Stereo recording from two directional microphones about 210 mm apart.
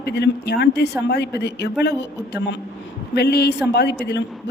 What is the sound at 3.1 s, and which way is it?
Speech, 50° left (ahead or behind).